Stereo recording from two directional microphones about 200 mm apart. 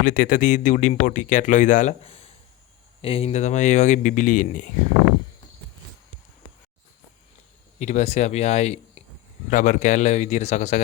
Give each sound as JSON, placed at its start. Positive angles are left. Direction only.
{"t": 0.0, "sound": "speech", "side_deg": 45}
{"t": 7.8, "sound": "speech", "side_deg": 35}